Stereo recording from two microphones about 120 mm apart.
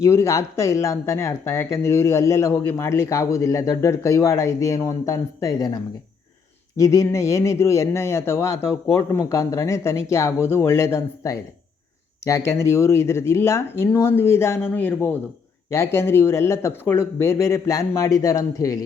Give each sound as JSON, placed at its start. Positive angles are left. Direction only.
{"t": 0.0, "sound": "speech", "side_deg": 25}